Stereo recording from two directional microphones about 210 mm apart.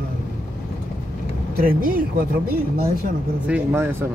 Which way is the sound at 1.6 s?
45° right (ahead or behind).